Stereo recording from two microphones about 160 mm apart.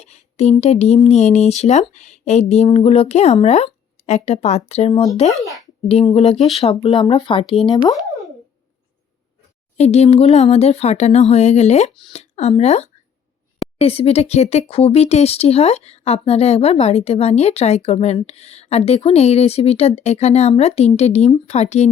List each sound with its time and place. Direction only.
0.0 s a sound: 45° left (ahead or behind)
0.6 s speech: 40° left (ahead or behind)
9.7 s speech: 40° left (ahead or behind)